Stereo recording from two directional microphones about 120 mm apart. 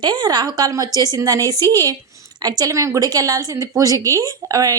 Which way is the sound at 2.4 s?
35° right (ahead or behind).